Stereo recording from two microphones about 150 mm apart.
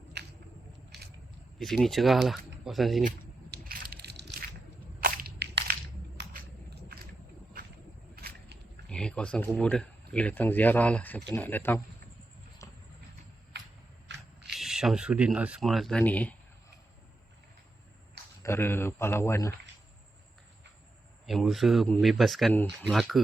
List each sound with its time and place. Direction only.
0.2 s a sound: 90° right
1.5 s speech: centre (ahead or behind)
3.5 s crushing: 80° right
4.9 s whip: 75° right (ahead or behind)
8.1 s a sound: 90° right
8.9 s speech: 5° left (ahead or behind)
14.5 s speech: 5° right (ahead or behind)
18.4 s speech: 15° left (ahead or behind)
21.2 s speech: centre (ahead or behind)